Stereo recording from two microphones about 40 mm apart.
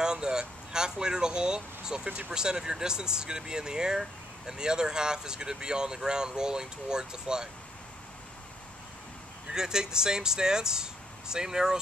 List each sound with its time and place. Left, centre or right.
0.0 s speech: centre
2.0 s speech: right
2.3 s speech: centre
9.5 s speech: centre